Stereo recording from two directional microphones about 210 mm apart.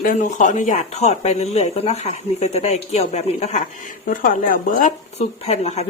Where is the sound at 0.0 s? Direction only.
40° left (ahead or behind).